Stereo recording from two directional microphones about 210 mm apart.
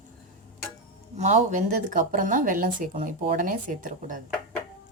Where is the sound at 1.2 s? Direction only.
35° right (ahead or behind).